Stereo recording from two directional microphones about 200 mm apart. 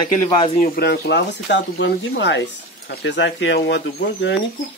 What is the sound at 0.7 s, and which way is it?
Speech, 55° left (ahead or behind).